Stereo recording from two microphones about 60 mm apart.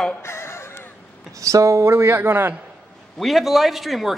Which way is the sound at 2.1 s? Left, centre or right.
Right.